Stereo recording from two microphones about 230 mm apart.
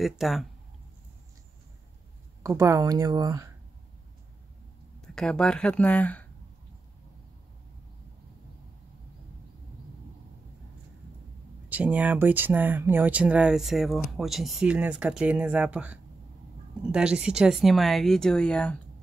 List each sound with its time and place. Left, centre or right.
0.0 s speech: centre
2.4 s speech: centre
5.0 s speech: centre
11.7 s speech: centre